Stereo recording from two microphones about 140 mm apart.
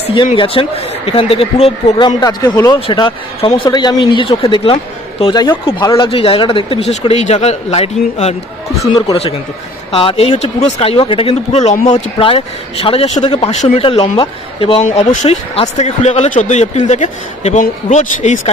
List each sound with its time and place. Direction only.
0.1 s speech: 35° left (ahead or behind)
2.0 s speech: 30° left (ahead or behind); by 8.4 s 50° left (ahead or behind)
9.9 s speech: 40° left (ahead or behind)
12.2 s speech: 40° left (ahead or behind)
14.9 s a man's voice: 55° left (ahead or behind)